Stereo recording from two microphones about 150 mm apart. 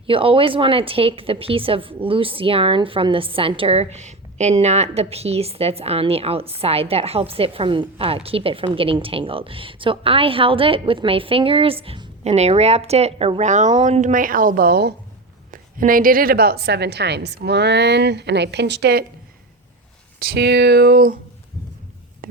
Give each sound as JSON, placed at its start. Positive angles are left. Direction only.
{"t": 0.1, "sound": "a woman's voice", "side_deg": -35}
{"t": 15.5, "sound": "a woman's voice", "side_deg": -70}
{"t": 18.9, "sound": "a woman's voice", "side_deg": -90}
{"t": 20.1, "sound": "a woman's voice", "side_deg": -90}
{"t": 22.2, "sound": "a sound", "side_deg": -70}